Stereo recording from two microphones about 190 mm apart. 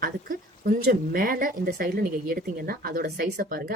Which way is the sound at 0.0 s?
50° right (ahead or behind).